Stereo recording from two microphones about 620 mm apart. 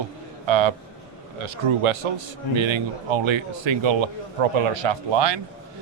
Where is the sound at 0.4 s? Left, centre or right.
Right.